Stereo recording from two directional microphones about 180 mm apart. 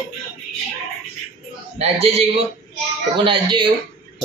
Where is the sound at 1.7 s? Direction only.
35° right (ahead or behind).